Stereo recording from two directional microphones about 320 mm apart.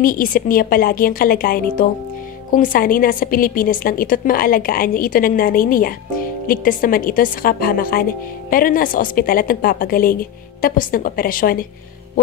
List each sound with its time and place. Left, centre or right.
0.0 s a woman's voice: left